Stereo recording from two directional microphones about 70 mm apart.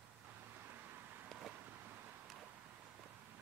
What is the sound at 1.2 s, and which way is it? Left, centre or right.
Vehicle, centre.